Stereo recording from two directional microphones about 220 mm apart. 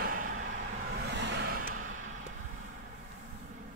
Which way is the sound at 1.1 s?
50° right (ahead or behind).